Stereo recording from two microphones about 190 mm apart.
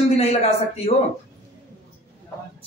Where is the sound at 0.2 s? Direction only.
35° left (ahead or behind).